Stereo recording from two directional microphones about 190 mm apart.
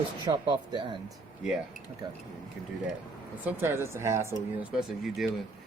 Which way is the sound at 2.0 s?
20° right (ahead or behind).